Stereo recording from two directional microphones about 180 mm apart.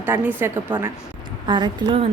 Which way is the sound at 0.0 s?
10° right (ahead or behind).